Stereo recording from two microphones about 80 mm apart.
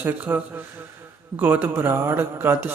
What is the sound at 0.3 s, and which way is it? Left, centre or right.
A man's voice, right.